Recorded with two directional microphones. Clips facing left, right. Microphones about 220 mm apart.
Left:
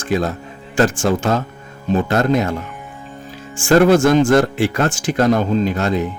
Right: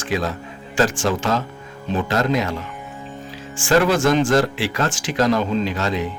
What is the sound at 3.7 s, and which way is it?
Speech, 45° left (ahead or behind).